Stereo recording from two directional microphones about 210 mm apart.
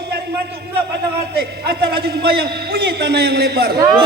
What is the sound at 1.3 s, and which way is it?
A man's voice, 50° right (ahead or behind).